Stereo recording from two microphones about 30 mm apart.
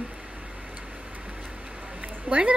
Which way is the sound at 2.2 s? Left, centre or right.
Right.